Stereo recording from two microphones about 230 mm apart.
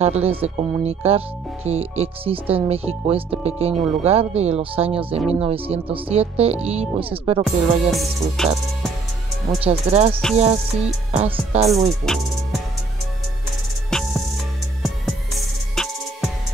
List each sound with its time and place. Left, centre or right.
0.0 s speech: right
7.4 s music: centre
9.6 s speech: right
13.8 s music: centre
15.7 s music: centre